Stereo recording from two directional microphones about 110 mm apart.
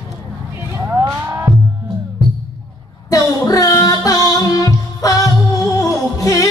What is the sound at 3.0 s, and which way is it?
Music, 30° left (ahead or behind).